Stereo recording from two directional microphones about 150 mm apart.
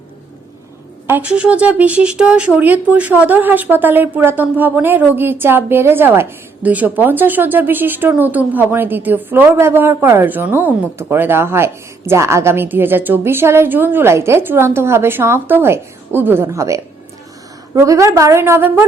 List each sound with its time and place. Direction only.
1.0 s a woman's voice: 10° right (ahead or behind)